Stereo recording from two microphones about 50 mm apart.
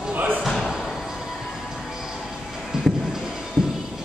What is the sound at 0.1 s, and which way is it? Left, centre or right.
Slam, right.